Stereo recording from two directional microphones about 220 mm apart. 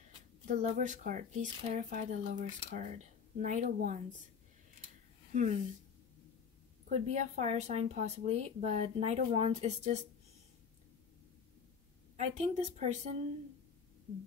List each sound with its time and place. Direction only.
0.5 s speech: 35° right (ahead or behind)
5.3 s speech: 30° right (ahead or behind)
6.9 s speech: 30° right (ahead or behind)
12.2 s speech: 30° right (ahead or behind)